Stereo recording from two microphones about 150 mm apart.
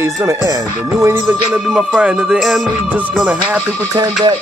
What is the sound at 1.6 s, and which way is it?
Speech, 5° right (ahead or behind).